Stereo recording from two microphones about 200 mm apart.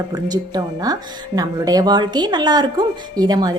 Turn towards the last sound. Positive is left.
turn(degrees=-20)  # may be behind; listen again after turning